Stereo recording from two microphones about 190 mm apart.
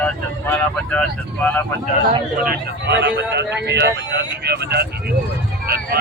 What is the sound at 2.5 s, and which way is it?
Speech, 60° right (ahead or behind).